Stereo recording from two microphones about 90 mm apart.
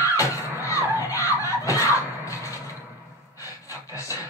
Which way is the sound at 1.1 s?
35° left (ahead or behind).